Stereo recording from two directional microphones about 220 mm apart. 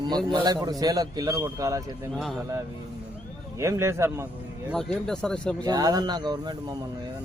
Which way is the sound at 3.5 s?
15° right (ahead or behind).